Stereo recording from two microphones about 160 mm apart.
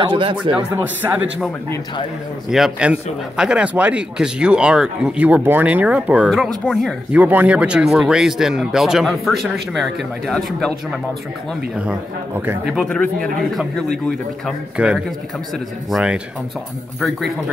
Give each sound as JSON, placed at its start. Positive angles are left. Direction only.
{"t": 0.0, "sound": "speech", "side_deg": -30}
{"t": 0.6, "sound": "speech", "side_deg": -10}
{"t": 2.5, "sound": "speech", "side_deg": -5}
{"t": 7.1, "sound": "speech", "side_deg": -10}
{"t": 12.6, "sound": "speech", "side_deg": 0}